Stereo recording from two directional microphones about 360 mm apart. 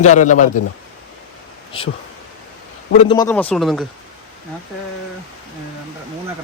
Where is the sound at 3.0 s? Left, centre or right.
Centre.